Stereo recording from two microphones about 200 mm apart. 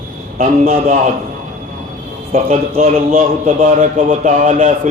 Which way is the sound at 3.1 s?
45° right (ahead or behind).